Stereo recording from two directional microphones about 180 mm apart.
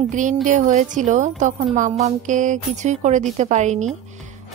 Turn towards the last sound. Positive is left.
turn(degrees=-40)  # may be behind; listen again after turning